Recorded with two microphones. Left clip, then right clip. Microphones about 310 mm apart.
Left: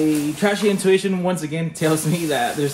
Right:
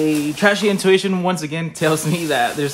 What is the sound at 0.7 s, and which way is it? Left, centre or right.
Speech, centre.